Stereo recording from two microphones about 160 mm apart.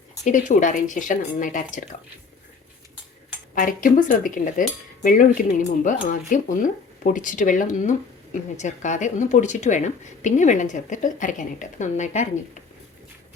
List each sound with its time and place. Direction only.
0.3 s speech: 50° left (ahead or behind)
3.5 s speech: 55° left (ahead or behind)